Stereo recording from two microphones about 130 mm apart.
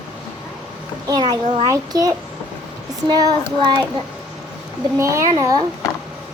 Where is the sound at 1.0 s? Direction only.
35° right (ahead or behind).